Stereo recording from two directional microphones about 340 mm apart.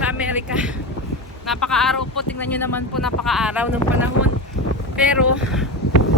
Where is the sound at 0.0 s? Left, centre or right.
Centre.